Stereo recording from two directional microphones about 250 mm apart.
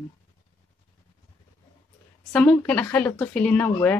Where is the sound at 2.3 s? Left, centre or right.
Centre.